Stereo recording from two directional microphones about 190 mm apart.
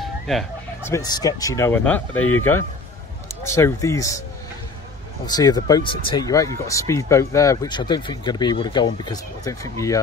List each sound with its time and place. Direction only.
0.0 s chicken: centre (ahead or behind)
0.8 s speech: 20° left (ahead or behind)
5.2 s speech: 20° left (ahead or behind)